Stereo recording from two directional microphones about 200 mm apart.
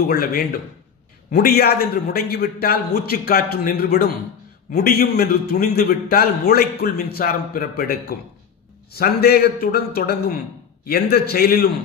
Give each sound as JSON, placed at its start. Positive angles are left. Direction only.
{"t": 0.0, "sound": "a man's voice", "side_deg": 50}